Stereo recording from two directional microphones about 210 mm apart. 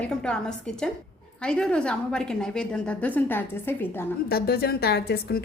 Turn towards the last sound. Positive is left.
turn(degrees=50)  # may be behind; listen again after turning